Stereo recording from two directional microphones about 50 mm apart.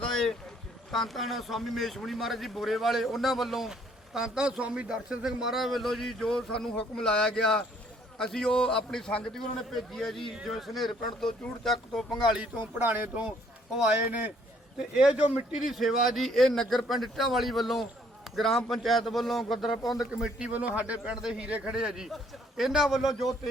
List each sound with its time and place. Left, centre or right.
0.0 s a sound: centre
0.9 s speech: centre
4.6 s speech: right
4.9 s a man's voice: centre
12.5 s speech: right
13.8 s speech: right
14.8 s speech: centre
15.6 s speech: centre
20.1 s speech: centre
20.5 s speech: right
21.0 s speech: centre
22.8 s speech: centre